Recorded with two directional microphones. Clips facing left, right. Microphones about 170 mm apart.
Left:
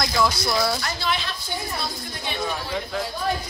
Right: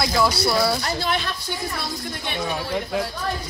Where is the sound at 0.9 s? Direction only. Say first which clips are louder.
Right 2 dB; 50° right (ahead or behind).